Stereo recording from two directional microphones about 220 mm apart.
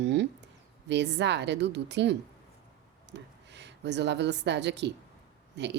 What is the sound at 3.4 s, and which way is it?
A woman's voice, 50° right (ahead or behind).